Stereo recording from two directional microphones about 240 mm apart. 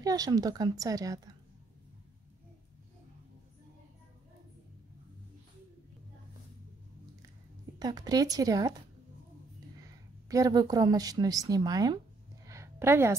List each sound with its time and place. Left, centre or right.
0.0 s a woman's voice: centre
7.8 s a woman's voice: centre
10.2 s a woman's voice: centre
12.4 s a sound: centre